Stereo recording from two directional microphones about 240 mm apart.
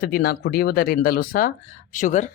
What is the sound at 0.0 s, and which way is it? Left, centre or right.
Speech, left.